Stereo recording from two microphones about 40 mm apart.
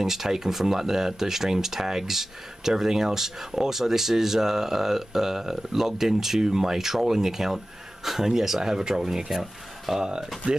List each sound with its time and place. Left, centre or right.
0.0 s speech: centre
9.3 s speech: centre
9.9 s speech: centre